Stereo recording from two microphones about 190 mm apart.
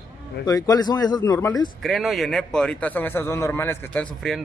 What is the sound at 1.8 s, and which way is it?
Speech, centre (ahead or behind).